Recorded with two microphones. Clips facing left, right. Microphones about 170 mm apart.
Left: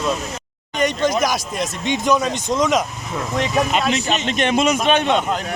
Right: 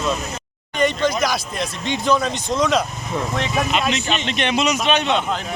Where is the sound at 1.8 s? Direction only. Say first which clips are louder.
Left 1 dB; 15° left (ahead or behind).